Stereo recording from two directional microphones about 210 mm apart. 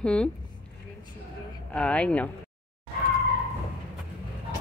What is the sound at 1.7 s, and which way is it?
Speech, 5° left (ahead or behind).